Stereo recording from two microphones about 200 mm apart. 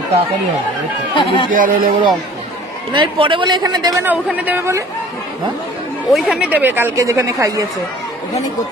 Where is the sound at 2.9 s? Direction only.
25° right (ahead or behind).